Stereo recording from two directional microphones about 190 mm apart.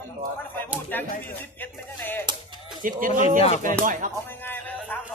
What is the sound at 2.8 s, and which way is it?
Speech, 45° right (ahead or behind).